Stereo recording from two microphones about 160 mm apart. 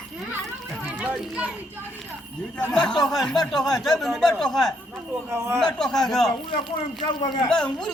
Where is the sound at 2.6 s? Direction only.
5° left (ahead or behind).